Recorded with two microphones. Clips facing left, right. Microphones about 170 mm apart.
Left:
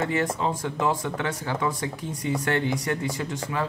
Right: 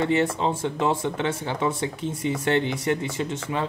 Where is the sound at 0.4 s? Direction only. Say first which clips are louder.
Right 2 dB; 25° right (ahead or behind).